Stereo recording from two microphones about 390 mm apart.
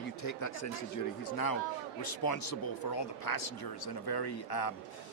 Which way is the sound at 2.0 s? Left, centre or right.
Left.